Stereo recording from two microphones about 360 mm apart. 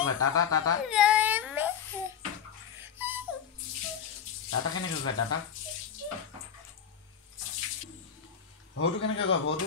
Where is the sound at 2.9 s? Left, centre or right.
Centre.